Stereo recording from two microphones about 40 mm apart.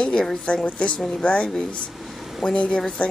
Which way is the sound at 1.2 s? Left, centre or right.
Left.